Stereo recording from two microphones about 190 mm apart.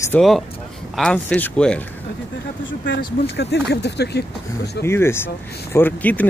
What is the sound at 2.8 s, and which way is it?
Speech, 65° left (ahead or behind).